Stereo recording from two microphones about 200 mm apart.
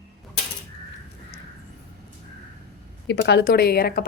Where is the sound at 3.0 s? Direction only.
55° left (ahead or behind).